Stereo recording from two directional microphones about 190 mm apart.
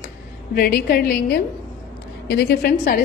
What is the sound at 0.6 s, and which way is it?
A woman's voice, 50° left (ahead or behind).